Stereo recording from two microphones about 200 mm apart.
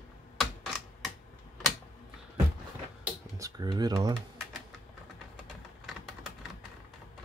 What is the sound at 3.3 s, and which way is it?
Speech, 20° right (ahead or behind).